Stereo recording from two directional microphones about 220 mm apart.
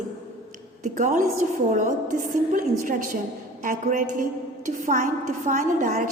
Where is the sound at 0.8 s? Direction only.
35° right (ahead or behind).